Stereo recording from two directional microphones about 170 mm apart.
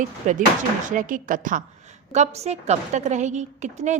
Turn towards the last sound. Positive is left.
turn(degrees=-45)  # may be behind; listen again after turning